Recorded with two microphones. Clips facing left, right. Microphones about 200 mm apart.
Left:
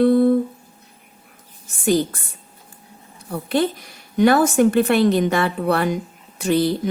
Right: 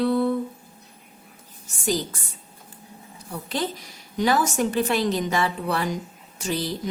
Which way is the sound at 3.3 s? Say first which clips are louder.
Left 8 dB; 60° left (ahead or behind).